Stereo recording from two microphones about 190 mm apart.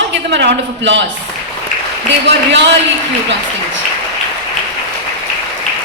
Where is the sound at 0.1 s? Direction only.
70° right (ahead or behind).